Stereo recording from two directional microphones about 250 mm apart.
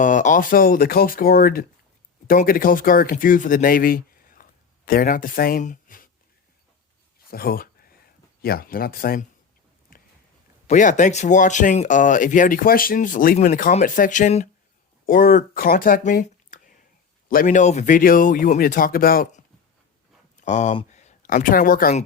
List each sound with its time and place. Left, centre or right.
0.0 s speech: left
7.3 s a sound: left
8.4 s speech: left
10.7 s speech: left